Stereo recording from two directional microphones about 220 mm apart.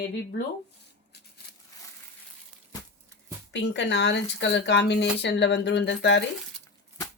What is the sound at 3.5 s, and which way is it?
Speech, 55° left (ahead or behind).